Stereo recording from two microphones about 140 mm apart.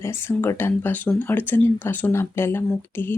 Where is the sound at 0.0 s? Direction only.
15° left (ahead or behind).